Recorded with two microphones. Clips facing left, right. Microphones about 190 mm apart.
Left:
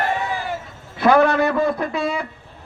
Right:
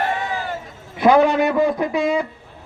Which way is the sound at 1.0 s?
15° right (ahead or behind).